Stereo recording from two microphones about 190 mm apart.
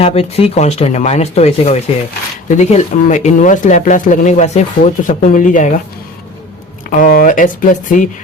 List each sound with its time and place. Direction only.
0.0 s speech: 30° left (ahead or behind)
7.0 s speech: 45° left (ahead or behind)